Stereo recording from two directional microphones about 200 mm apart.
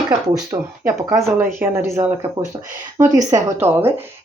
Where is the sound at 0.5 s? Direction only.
25° right (ahead or behind).